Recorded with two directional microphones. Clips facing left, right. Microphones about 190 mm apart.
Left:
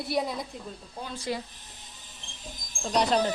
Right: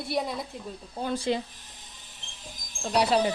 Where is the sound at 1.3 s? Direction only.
25° right (ahead or behind).